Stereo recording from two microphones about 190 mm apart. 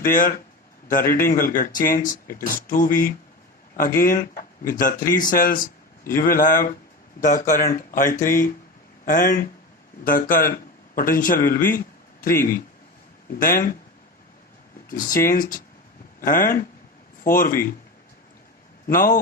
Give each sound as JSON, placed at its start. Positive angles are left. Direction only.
{"t": 0.0, "sound": "speech", "side_deg": 50}
{"t": 14.8, "sound": "speech", "side_deg": 45}
{"t": 18.9, "sound": "speech", "side_deg": 50}